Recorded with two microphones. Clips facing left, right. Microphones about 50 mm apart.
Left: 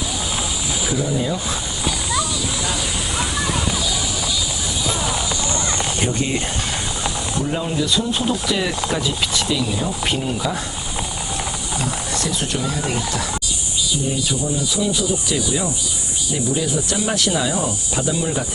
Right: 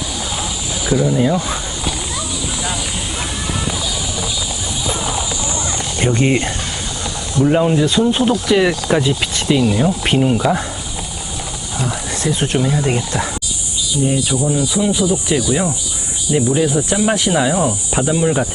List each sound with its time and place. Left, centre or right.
1.0 s speech: right
4.9 s clip-clop: centre
6.0 s speech: right
12.1 s speech: right
14.3 s speech: right